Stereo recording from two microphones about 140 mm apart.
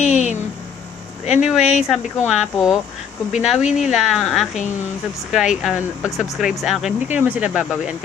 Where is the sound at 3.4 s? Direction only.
5° right (ahead or behind).